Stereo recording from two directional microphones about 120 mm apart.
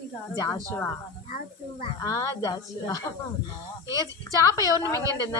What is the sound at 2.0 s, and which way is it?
A woman's voice, 25° left (ahead or behind).